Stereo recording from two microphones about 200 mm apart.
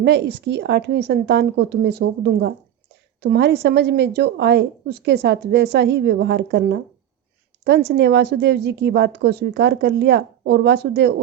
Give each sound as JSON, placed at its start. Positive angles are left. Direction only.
{"t": 0.0, "sound": "a woman's voice", "side_deg": -55}